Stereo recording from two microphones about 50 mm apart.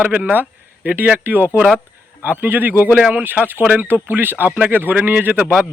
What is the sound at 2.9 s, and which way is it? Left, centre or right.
A man's voice, right.